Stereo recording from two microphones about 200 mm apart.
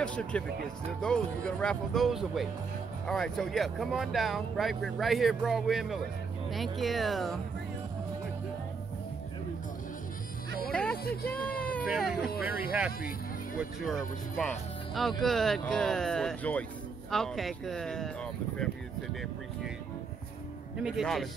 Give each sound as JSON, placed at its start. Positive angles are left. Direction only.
{"t": 0.0, "sound": "speech", "side_deg": 5}
{"t": 10.7, "sound": "music", "side_deg": 5}
{"t": 11.1, "sound": "speech", "side_deg": 50}
{"t": 12.4, "sound": "speech", "side_deg": -10}
{"t": 20.7, "sound": "speech", "side_deg": -5}